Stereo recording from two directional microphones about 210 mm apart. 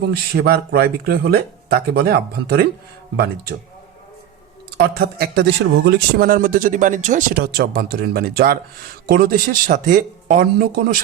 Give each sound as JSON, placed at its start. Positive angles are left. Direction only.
{"t": 0.1, "sound": "a man's voice", "side_deg": -50}
{"t": 4.8, "sound": "a man's voice", "side_deg": -50}